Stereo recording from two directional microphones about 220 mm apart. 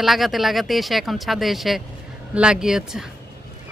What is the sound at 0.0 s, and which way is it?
Speech, centre (ahead or behind).